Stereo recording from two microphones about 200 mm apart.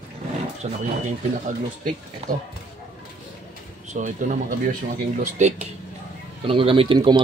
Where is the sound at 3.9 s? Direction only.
40° right (ahead or behind).